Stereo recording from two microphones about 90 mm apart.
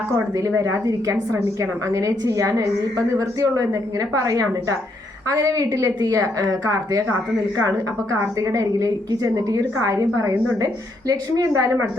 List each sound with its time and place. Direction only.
0.3 s a woman's voice: 40° right (ahead or behind)
8.4 s a woman's voice: 40° right (ahead or behind)